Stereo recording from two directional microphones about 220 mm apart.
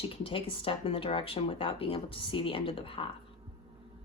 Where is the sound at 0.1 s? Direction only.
25° left (ahead or behind).